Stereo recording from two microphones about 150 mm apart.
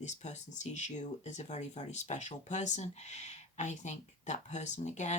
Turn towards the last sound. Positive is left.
turn(degrees=50)  # may be behind; listen again after turning